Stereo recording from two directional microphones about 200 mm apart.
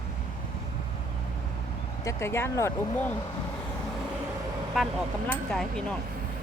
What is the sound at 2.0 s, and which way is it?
Speech, 15° left (ahead or behind).